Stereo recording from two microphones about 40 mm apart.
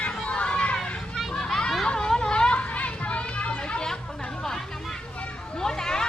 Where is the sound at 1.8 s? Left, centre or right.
Centre.